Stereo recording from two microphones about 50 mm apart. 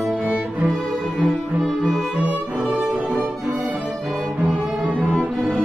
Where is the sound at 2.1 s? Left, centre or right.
Right.